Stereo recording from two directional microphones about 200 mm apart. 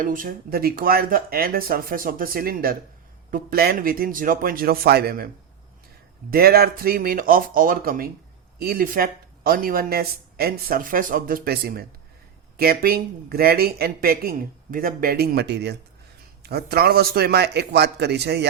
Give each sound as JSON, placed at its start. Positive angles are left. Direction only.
{"t": 0.0, "sound": "speech", "side_deg": -45}
{"t": 6.3, "sound": "speech", "side_deg": -50}